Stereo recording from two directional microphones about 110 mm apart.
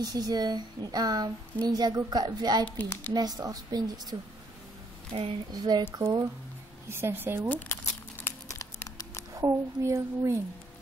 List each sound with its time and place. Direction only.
0.0 s speech: 40° right (ahead or behind)
5.5 s speech: 40° right (ahead or behind)
6.9 s a woman's voice: 20° right (ahead or behind)
7.4 s crumpling: 15° left (ahead or behind)
8.5 s a sound: 30° left (ahead or behind)
9.3 s a woman's voice: 30° right (ahead or behind)